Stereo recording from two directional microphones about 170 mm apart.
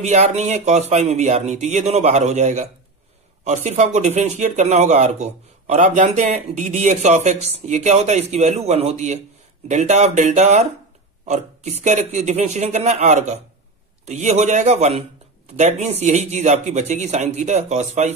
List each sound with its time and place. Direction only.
0.0 s speech: 40° right (ahead or behind)